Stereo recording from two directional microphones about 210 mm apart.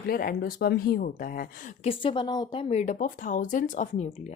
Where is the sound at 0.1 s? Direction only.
45° left (ahead or behind).